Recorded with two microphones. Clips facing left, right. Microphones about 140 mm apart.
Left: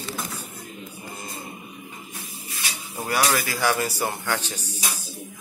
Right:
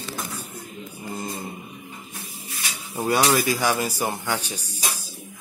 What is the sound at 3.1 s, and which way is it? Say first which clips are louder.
Speech: right 4 dB; 20° right (ahead or behind).